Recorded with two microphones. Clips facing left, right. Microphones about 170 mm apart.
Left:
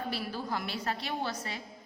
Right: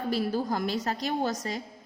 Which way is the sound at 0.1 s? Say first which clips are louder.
Right 7 dB; 45° right (ahead or behind).